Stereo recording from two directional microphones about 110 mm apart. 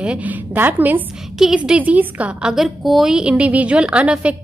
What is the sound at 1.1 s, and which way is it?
A woman's voice, 5° right (ahead or behind).